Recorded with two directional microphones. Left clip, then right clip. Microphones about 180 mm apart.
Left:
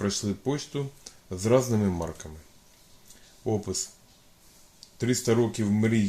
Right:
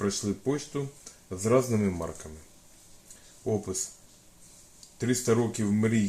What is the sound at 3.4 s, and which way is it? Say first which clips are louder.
Speech: left 1 dB; 60° left (ahead or behind).